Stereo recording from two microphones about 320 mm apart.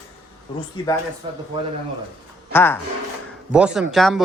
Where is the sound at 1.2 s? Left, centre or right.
Centre.